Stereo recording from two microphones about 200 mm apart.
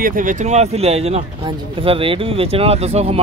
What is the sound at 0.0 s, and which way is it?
Speech, 40° right (ahead or behind).